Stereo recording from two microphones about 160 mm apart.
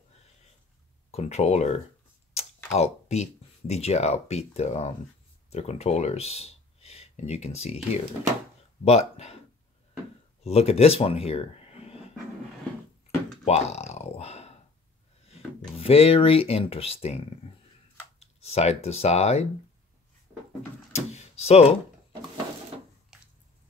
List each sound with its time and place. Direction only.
1.1 s speech: 40° left (ahead or behind)
10.4 s speech: 40° left (ahead or behind)
13.5 s a sound: 40° left (ahead or behind)
15.8 s speech: 40° left (ahead or behind)
20.9 s drawer open or close: 40° left (ahead or behind)
23.1 s a sound: 5° right (ahead or behind)